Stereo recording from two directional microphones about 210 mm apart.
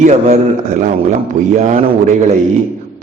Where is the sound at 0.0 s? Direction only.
35° right (ahead or behind).